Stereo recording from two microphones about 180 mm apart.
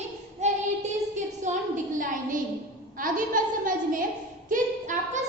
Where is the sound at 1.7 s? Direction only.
45° right (ahead or behind).